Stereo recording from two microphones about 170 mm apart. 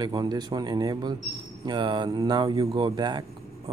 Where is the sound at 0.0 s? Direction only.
25° right (ahead or behind).